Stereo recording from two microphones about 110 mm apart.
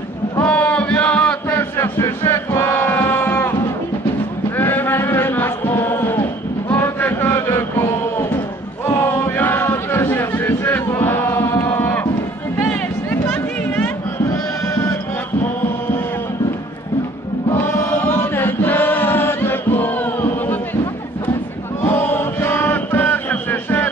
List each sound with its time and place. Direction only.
0.4 s a sound: 10° left (ahead or behind)
4.6 s chant: 20° left (ahead or behind)
8.8 s a sound: 25° left (ahead or behind)
12.5 s music: 20° left (ahead or behind)
14.3 s sheep: 30° left (ahead or behind)
17.5 s chant: 20° left (ahead or behind)
21.8 s chant: 20° left (ahead or behind)